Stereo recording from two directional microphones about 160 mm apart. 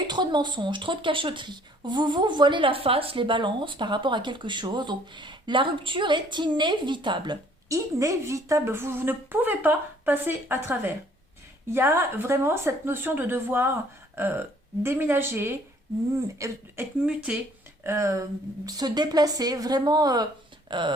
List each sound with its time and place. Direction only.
0.1 s speech: 25° right (ahead or behind)
17.0 s speech: 5° right (ahead or behind)
17.8 s speech: 20° right (ahead or behind)